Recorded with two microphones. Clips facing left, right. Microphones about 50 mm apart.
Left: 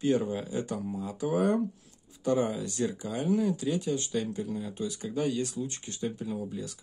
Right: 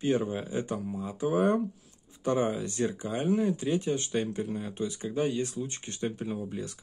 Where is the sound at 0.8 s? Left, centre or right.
Centre.